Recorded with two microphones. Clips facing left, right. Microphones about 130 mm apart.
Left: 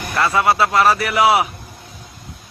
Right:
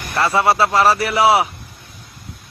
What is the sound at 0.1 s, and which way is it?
A man's voice, 30° right (ahead or behind).